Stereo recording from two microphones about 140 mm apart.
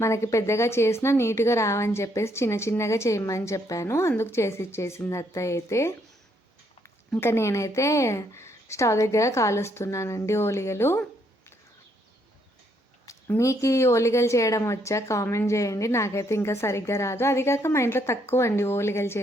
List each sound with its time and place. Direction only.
0.0 s a woman's voice: 20° left (ahead or behind)
7.1 s a woman's voice: 15° left (ahead or behind)
13.1 s a woman's voice: 20° left (ahead or behind)